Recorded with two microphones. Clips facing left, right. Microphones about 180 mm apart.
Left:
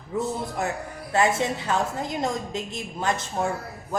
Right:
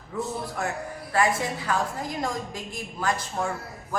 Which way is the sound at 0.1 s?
20° left (ahead or behind).